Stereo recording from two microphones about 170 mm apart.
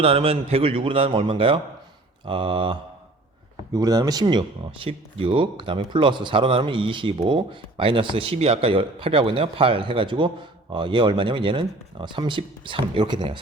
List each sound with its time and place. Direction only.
0.0 s a man's voice: 35° right (ahead or behind)
3.8 s speech: 20° right (ahead or behind)